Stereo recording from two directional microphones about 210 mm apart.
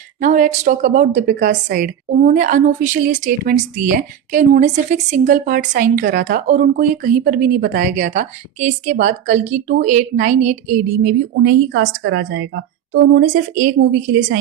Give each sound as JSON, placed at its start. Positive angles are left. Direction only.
{"t": 0.2, "sound": "a woman's voice", "side_deg": -35}
{"t": 11.3, "sound": "a woman's voice", "side_deg": -55}
{"t": 13.3, "sound": "a woman's voice", "side_deg": -40}